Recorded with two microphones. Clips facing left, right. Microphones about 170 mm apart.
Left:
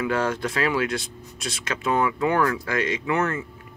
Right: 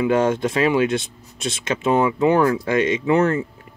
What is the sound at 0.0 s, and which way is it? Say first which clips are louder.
Speech: right 6 dB; 20° right (ahead or behind).